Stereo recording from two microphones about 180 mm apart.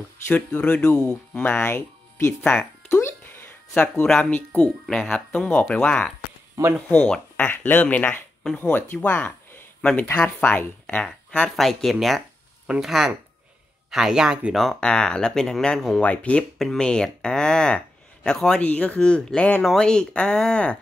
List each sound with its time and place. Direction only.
0.3 s speech: 10° left (ahead or behind)